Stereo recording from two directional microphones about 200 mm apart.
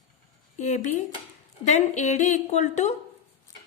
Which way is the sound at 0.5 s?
35° left (ahead or behind).